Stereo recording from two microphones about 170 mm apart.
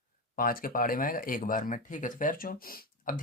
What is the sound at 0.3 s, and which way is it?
Speech, 55° left (ahead or behind).